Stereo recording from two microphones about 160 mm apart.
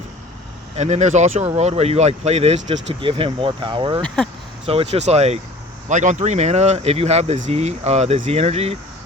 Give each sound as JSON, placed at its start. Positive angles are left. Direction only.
{"t": 0.8, "sound": "speech", "side_deg": -45}
{"t": 4.0, "sound": "speech", "side_deg": 5}
{"t": 4.6, "sound": "speech", "side_deg": -35}